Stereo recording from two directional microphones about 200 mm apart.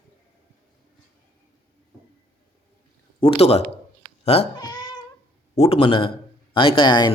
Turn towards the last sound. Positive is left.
turn(degrees=20)  # may be behind; listen again after turning